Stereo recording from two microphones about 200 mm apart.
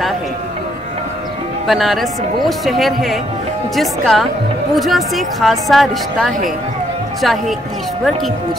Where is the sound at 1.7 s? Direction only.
Centre (ahead or behind).